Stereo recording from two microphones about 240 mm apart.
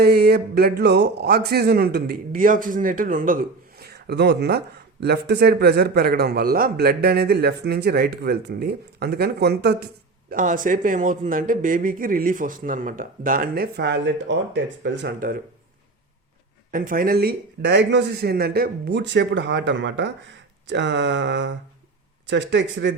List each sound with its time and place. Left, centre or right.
0.0 s speech: right
16.7 s speech: right